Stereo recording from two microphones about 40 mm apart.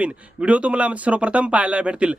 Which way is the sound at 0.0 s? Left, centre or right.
Right.